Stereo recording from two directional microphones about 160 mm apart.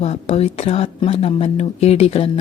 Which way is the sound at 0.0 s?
40° left (ahead or behind).